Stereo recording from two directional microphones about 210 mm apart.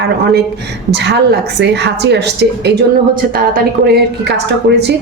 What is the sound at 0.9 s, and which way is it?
A woman's voice, 55° right (ahead or behind).